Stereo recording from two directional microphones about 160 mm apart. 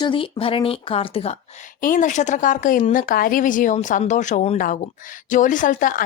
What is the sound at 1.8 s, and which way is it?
Speech, 55° left (ahead or behind).